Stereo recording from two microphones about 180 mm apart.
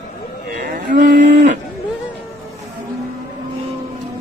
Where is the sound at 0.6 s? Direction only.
50° right (ahead or behind).